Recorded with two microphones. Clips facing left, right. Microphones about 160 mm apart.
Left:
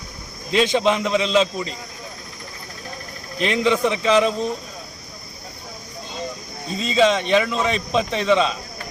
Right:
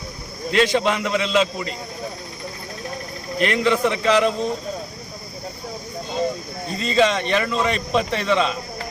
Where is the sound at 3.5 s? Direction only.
10° left (ahead or behind).